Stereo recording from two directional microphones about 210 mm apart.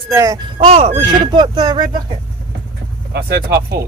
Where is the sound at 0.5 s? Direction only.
30° right (ahead or behind).